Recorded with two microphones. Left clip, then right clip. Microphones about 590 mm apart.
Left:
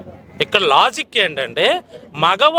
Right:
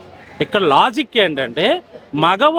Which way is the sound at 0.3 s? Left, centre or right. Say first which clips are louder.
Even; left.